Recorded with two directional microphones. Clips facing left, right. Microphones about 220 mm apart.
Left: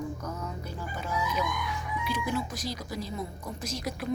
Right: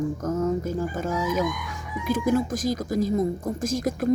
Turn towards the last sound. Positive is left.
turn(degrees=-45)  # may be behind; listen again after turning